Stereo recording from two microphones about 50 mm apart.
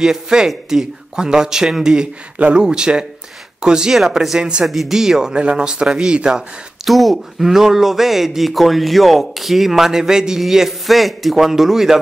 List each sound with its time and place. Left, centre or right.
0.0 s speech: centre
2.3 s speech: right
2.6 s speech: centre
6.9 s speech: centre